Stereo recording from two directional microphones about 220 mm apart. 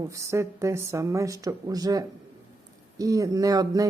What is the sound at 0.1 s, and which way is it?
Speech, 15° right (ahead or behind).